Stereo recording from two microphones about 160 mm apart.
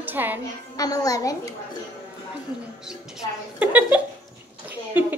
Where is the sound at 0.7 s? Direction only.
25° left (ahead or behind).